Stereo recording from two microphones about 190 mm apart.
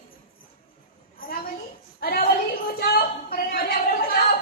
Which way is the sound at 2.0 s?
50° left (ahead or behind).